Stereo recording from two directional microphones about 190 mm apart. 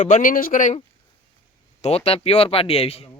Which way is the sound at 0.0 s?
40° left (ahead or behind).